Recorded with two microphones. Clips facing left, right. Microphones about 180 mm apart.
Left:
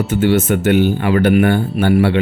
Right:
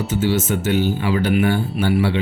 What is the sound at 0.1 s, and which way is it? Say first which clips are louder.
Speech: left 5 dB; 55° left (ahead or behind).